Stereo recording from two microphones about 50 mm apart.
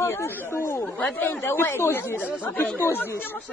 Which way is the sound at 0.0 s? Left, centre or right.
Left.